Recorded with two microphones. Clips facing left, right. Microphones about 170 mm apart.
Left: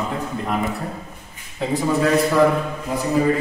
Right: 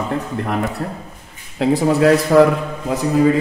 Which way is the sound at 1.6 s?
75° right (ahead or behind).